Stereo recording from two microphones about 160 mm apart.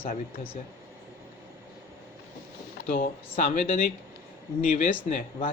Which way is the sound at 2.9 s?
60° left (ahead or behind).